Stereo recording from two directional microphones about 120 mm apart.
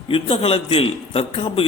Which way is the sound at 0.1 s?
50° left (ahead or behind).